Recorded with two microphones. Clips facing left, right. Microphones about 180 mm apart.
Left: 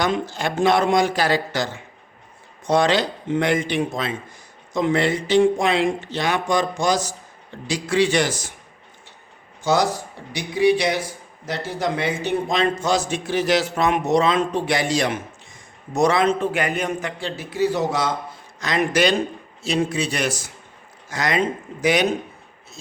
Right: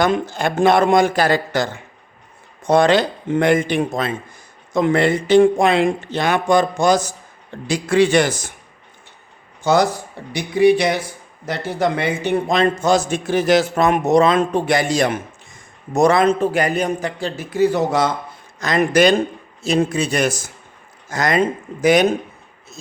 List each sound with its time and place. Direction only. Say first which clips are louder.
0.0 s a man's voice: right 4 dB; 55° right (ahead or behind)
9.7 s a man's voice: right 4 dB; 55° right (ahead or behind)